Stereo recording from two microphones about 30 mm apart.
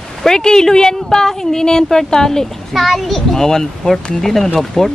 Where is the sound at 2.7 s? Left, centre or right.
Centre.